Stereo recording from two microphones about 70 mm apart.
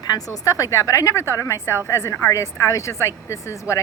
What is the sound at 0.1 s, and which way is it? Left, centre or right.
A woman's voice, left.